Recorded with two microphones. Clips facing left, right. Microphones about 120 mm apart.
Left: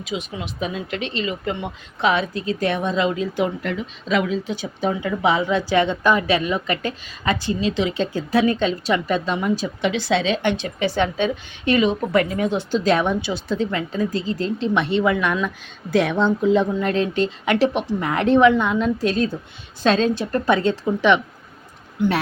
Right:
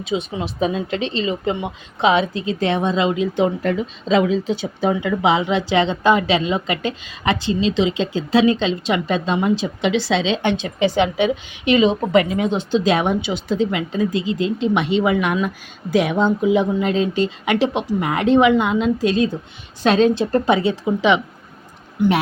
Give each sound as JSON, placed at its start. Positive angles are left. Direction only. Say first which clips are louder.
{"t": 0.0, "sound": "a woman's voice", "louder": "right 5 dB", "side_deg": -30}
{"t": 3.6, "sound": "speech", "louder": "right 6 dB", "side_deg": -35}
{"t": 5.5, "sound": "a woman's voice", "louder": "right 1 dB", "side_deg": -90}
{"t": 5.9, "sound": "a woman's voice", "louder": "right 2 dB", "side_deg": -20}
{"t": 7.3, "sound": "a woman's voice", "louder": "right 3 dB", "side_deg": -90}
{"t": 7.7, "sound": "a woman's voice", "louder": "right 2 dB", "side_deg": -25}
{"t": 20.1, "sound": "a woman's voice", "louder": "right 5 dB", "side_deg": -25}
{"t": 20.5, "sound": "speech", "louder": "right 1 dB", "side_deg": -10}